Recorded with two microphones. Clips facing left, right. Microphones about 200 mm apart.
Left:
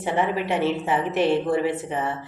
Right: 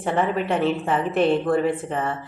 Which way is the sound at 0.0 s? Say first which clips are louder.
Right 1 dB; 15° left (ahead or behind).